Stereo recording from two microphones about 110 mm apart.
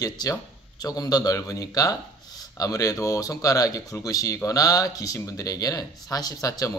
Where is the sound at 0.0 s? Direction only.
35° left (ahead or behind).